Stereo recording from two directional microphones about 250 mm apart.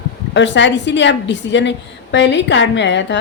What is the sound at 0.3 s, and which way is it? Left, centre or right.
A woman's voice, left.